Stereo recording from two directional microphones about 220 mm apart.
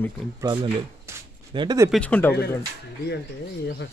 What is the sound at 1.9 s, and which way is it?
Speech, 5° left (ahead or behind).